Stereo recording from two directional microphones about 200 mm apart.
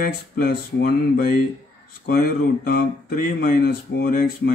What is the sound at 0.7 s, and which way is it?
Speech, 50° left (ahead or behind).